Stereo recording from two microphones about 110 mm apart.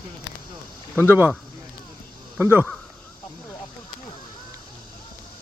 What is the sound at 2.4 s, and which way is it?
Speech, 20° right (ahead or behind).